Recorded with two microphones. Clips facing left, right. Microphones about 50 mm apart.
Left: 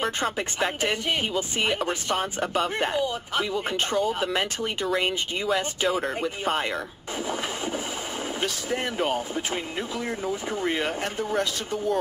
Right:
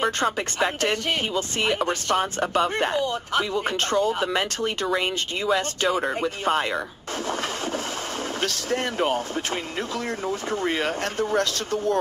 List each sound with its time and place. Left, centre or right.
0.0 s speech: centre
4.1 s speech: centre
7.2 s a sound: centre
8.4 s speech: centre